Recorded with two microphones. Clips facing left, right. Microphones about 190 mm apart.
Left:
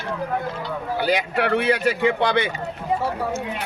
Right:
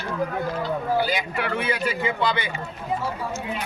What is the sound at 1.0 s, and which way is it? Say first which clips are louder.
Speech: left 5 dB; 65° left (ahead or behind).